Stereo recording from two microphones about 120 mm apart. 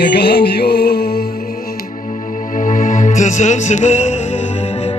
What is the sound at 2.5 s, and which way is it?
Music, 90° left.